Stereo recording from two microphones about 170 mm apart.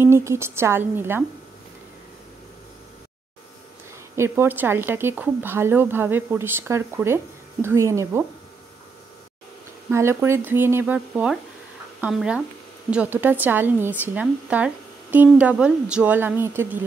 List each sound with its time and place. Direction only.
0.0 s speech: 15° right (ahead or behind)
4.2 s speech: 15° right (ahead or behind)
9.8 s speech: 15° right (ahead or behind)